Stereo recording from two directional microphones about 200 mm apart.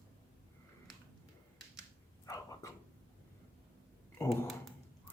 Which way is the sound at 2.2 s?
15° left (ahead or behind).